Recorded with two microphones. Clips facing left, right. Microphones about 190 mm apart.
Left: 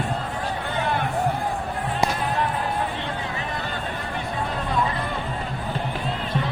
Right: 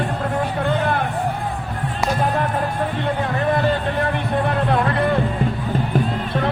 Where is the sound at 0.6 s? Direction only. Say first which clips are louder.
Right 4 dB; 55° right (ahead or behind).